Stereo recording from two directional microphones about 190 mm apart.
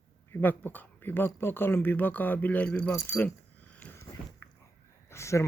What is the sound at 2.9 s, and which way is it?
Keys jangling, 10° left (ahead or behind).